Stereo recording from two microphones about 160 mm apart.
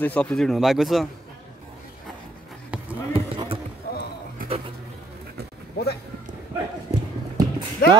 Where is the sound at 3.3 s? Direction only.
35° right (ahead or behind).